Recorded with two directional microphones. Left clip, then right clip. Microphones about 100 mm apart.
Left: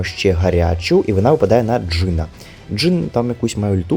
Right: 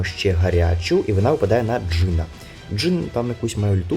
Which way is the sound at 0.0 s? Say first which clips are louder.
Left 5 dB; 40° left (ahead or behind).